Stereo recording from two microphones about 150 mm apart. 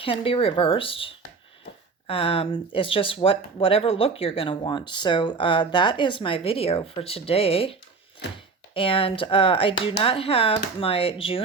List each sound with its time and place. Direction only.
0.0 s speech: 35° left (ahead or behind)